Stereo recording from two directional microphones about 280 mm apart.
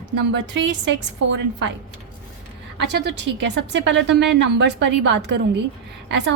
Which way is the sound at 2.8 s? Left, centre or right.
Right.